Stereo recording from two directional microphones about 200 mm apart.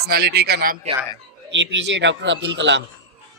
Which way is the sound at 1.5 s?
65° right (ahead or behind).